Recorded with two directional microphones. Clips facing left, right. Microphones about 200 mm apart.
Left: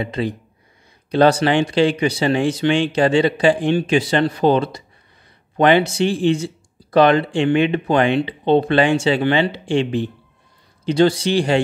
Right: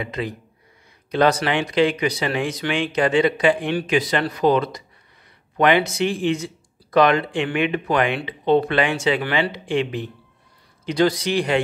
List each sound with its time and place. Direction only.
0.0 s speech: 30° left (ahead or behind)